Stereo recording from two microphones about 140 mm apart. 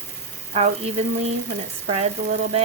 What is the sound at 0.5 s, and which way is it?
Speech, 50° right (ahead or behind).